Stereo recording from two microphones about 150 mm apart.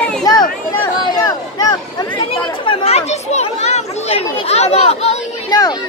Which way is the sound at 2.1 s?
35° left (ahead or behind).